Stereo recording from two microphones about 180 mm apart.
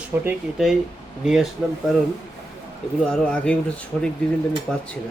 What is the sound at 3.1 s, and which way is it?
Speech, 5° left (ahead or behind).